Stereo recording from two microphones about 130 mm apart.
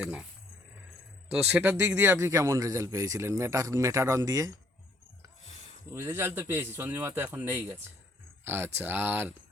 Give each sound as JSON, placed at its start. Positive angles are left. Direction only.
{"t": 0.0, "sound": "speech", "side_deg": -10}
{"t": 1.3, "sound": "a man's voice", "side_deg": -10}
{"t": 5.9, "sound": "a man's voice", "side_deg": -20}